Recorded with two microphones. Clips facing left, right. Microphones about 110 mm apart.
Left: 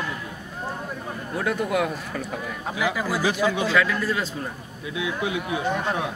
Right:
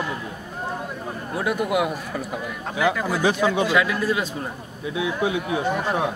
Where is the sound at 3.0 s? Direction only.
5° left (ahead or behind).